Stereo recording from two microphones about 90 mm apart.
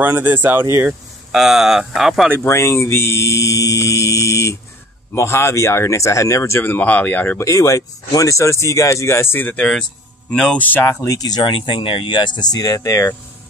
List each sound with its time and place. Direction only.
0.0 s speech: 20° right (ahead or behind)
1.3 s speech: 5° right (ahead or behind)
2.4 s speech: 30° left (ahead or behind)
7.4 s speech: 35° left (ahead or behind); by 11.0 s 20° left (ahead or behind)
11.0 s speech: 40° left (ahead or behind)
11.4 s speech: 70° left (ahead or behind); by 13.1 s 35° left (ahead or behind)